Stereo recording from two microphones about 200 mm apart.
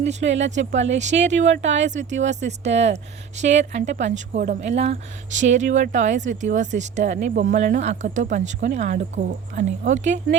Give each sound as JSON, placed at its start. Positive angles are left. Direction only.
{"t": 0.2, "sound": "speech", "side_deg": -65}
{"t": 0.9, "sound": "speech", "side_deg": -35}
{"t": 1.3, "sound": "speech", "side_deg": -65}
{"t": 1.7, "sound": "speech", "side_deg": -35}